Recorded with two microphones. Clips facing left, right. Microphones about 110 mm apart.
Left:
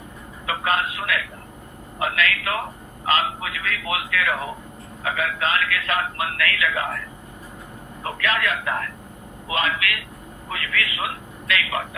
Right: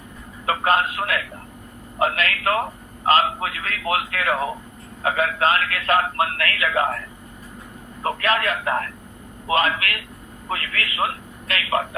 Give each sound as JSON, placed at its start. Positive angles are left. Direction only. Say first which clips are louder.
{"t": 0.4, "sound": "a man's voice", "louder": "right 4 dB", "side_deg": -40}
{"t": 8.0, "sound": "a man's voice", "louder": "right 3 dB", "side_deg": -45}